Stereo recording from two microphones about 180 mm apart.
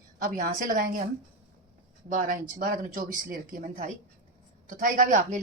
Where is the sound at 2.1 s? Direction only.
50° right (ahead or behind).